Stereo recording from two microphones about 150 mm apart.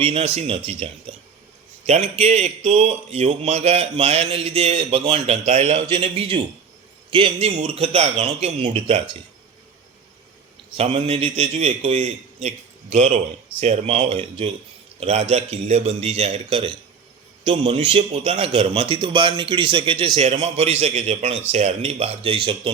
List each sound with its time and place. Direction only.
0.0 s a man's voice: 40° right (ahead or behind)
10.8 s speech: 40° right (ahead or behind)
13.6 s a man's voice: 40° right (ahead or behind)